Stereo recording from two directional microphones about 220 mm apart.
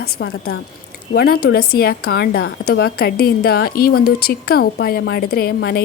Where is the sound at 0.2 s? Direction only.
45° left (ahead or behind).